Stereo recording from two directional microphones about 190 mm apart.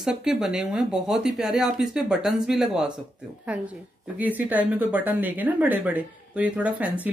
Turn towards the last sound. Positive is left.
turn(degrees=-5)  # may be behind; listen again after turning